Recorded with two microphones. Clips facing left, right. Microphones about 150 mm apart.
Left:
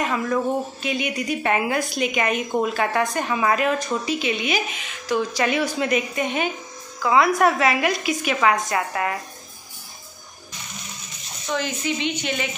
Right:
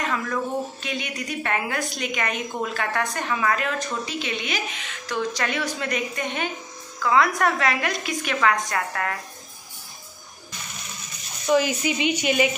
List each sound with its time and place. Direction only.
0.0 s a woman's voice: 15° left (ahead or behind)
11.4 s a woman's voice: 10° right (ahead or behind)